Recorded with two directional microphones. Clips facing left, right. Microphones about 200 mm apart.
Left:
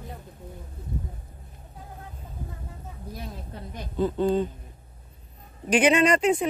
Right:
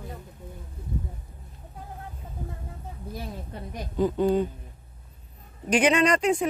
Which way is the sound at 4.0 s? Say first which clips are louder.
Right 1 dB; 15° right (ahead or behind).